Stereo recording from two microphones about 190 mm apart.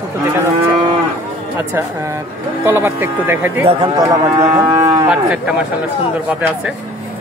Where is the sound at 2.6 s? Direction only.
10° right (ahead or behind).